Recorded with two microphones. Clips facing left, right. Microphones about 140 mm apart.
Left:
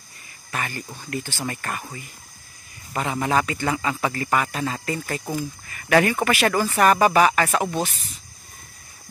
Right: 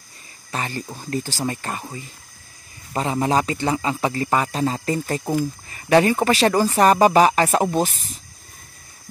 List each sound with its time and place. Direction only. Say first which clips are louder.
0.5 s speech: right 2 dB; 25° right (ahead or behind)
7.8 s speech: right 4 dB; centre (ahead or behind)